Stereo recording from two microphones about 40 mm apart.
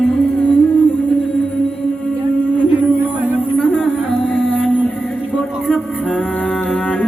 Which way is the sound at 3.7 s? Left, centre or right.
Left.